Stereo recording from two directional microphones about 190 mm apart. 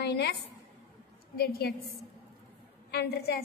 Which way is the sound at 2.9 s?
60° left (ahead or behind).